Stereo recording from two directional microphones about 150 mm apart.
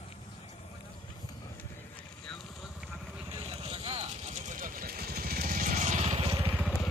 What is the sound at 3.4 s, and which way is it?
Vehicle, 40° right (ahead or behind).